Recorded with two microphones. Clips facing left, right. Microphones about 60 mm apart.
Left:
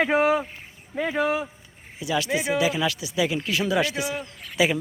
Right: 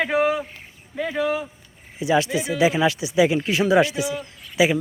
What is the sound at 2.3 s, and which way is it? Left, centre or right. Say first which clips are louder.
Speech: even; left.